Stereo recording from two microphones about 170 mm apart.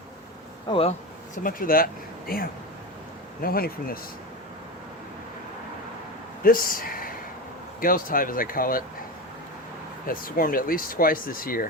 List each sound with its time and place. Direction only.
0.7 s speech: 35° left (ahead or behind)
1.5 s speech: 55° left (ahead or behind)
6.4 s speech: 55° left (ahead or behind)
10.1 s speech: 55° left (ahead or behind)